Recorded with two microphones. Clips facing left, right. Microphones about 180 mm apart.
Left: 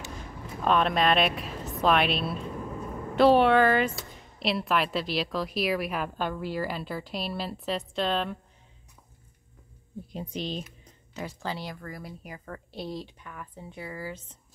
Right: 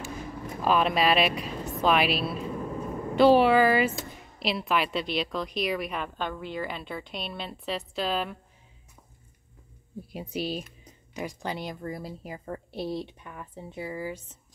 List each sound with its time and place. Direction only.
0.6 s a woman's voice: 5° right (ahead or behind)
10.1 s speech: 10° right (ahead or behind)